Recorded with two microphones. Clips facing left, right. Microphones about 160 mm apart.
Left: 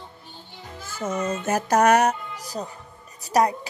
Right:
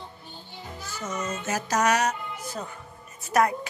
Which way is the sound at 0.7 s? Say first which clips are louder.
Left 6 dB; 50° left (ahead or behind).